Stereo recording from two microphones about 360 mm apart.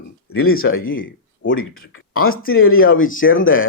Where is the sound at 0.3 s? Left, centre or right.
Left.